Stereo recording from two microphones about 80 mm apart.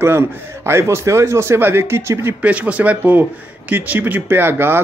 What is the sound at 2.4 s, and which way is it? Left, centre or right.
Speech, centre.